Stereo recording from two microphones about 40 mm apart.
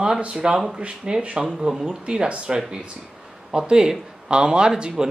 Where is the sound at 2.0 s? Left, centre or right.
Right.